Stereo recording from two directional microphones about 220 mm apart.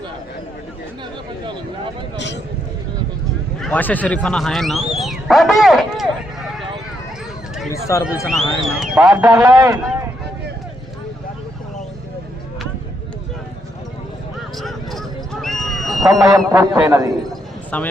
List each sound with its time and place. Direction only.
2.1 s a man's voice: 55° left (ahead or behind)
3.6 s speech: 5° left (ahead or behind)
7.7 s speech: 15° left (ahead or behind)
8.3 s speech: centre (ahead or behind)
9.0 s a man's voice: 15° right (ahead or behind)
14.6 s a sound: centre (ahead or behind)
16.3 s a man's voice: 10° right (ahead or behind)
17.7 s speech: 5° left (ahead or behind)